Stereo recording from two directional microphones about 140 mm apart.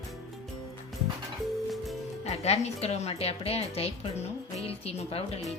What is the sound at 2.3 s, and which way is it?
A woman's voice, 50° left (ahead or behind).